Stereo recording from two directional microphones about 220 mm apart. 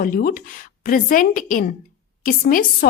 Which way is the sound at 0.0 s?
40° left (ahead or behind).